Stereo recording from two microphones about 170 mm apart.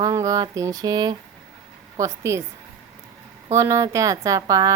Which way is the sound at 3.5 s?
15° right (ahead or behind).